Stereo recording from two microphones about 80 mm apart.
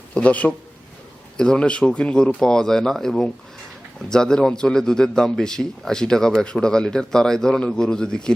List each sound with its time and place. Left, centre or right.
0.1 s a man's voice: centre